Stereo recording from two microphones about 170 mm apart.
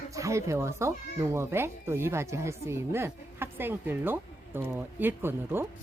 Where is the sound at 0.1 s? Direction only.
20° right (ahead or behind).